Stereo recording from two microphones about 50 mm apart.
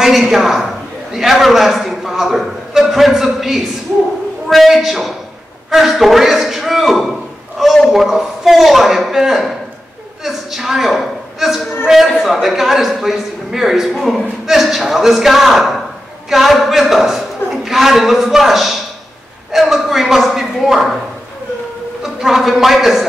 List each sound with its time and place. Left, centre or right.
0.3 s a man's voice: centre
7.1 s a sound: centre
7.9 s a man's voice: centre
22.0 s a man's voice: centre